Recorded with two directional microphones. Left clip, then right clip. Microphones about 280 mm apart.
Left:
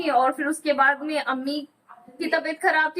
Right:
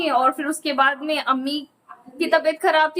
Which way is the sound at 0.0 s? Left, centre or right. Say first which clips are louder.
Right 2 dB; centre.